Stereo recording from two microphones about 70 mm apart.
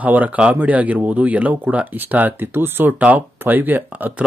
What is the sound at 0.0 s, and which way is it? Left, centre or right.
Speech, right.